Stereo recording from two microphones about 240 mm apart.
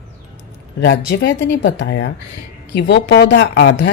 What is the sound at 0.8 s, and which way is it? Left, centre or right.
Speech, left.